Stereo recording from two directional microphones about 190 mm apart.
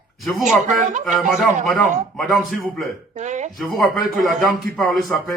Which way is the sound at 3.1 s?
40° right (ahead or behind).